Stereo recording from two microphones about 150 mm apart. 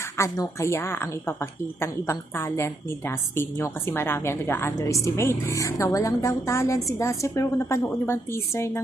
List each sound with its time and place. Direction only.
0.2 s a woman's voice: 20° left (ahead or behind)